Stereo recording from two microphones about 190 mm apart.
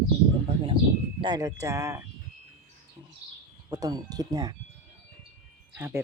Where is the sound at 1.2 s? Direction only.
20° right (ahead or behind).